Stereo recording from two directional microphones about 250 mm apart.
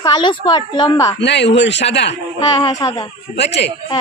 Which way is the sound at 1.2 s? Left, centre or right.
Left.